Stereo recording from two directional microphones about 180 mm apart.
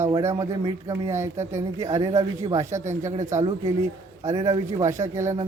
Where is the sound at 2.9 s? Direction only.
40° right (ahead or behind).